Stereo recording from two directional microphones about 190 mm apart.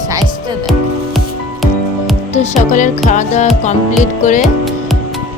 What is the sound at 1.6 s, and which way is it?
Music, centre (ahead or behind).